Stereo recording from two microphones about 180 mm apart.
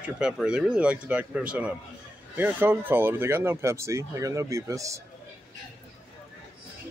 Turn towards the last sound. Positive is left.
turn(degrees=-15)  # may be behind; listen again after turning